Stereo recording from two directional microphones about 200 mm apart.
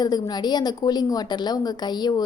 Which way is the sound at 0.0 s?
20° left (ahead or behind).